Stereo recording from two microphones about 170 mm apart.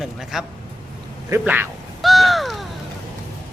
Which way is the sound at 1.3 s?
15° right (ahead or behind).